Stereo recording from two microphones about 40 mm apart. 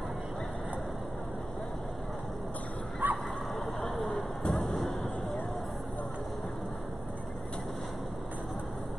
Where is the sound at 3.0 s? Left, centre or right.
Right.